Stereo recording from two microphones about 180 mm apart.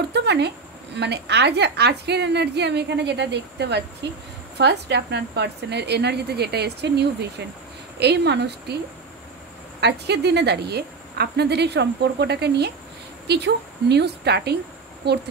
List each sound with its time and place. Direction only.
0.1 s a woman's voice: 70° right (ahead or behind)
9.8 s a woman's voice: 65° right (ahead or behind)